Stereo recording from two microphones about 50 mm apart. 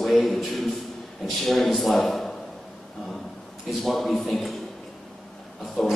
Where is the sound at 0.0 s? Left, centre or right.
Centre.